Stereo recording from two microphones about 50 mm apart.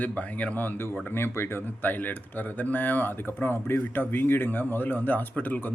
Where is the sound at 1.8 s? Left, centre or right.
Left.